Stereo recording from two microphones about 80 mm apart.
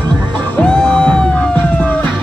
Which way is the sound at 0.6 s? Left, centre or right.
Centre.